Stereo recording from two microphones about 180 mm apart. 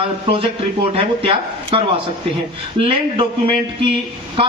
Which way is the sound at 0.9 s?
30° right (ahead or behind).